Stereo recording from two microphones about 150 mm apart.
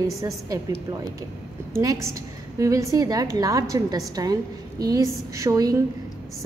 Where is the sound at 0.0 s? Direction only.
20° right (ahead or behind).